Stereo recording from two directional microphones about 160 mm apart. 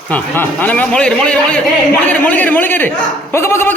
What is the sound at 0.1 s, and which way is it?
Speech, 10° left (ahead or behind).